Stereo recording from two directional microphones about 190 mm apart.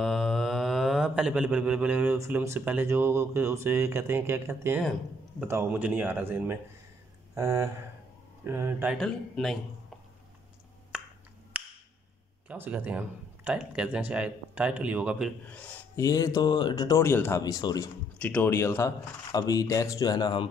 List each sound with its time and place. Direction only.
0.0 s speech: centre (ahead or behind)
8.9 s speech: centre (ahead or behind)
10.9 s finger snapping: 5° right (ahead or behind)
12.4 s speech: 10° right (ahead or behind)
15.5 s speech: 10° left (ahead or behind)
18.2 s speech: 10° left (ahead or behind); by 20.4 s 25° left (ahead or behind)